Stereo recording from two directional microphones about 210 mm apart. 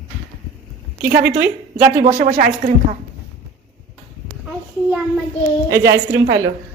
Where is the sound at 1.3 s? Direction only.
10° right (ahead or behind).